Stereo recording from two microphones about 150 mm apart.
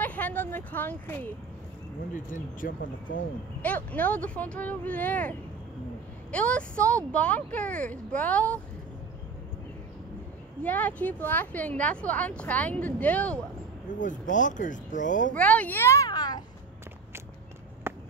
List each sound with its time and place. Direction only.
0.0 s speech: 10° left (ahead or behind)
2.1 s speech: 60° left (ahead or behind)
3.6 s speech: 10° left (ahead or behind)
6.3 s speech: 10° left (ahead or behind)
10.6 s speech: 10° left (ahead or behind)
13.9 s speech: 60° left (ahead or behind)
15.3 s a child's voice: 10° left (ahead or behind); by 16.4 s 25° left (ahead or behind)
17.9 s a sound: 15° right (ahead or behind)